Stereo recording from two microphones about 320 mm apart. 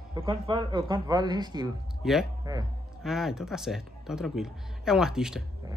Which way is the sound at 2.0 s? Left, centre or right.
Centre.